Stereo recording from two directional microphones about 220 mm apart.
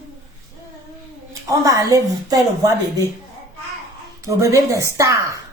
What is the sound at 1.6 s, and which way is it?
A woman's voice, 15° right (ahead or behind).